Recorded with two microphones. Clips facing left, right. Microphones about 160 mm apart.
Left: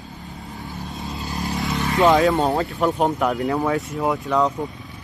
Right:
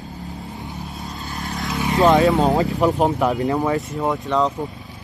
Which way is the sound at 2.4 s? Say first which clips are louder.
Right 3 dB; 15° right (ahead or behind).